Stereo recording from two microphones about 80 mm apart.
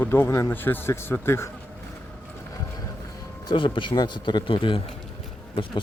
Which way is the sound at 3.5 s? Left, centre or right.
Left.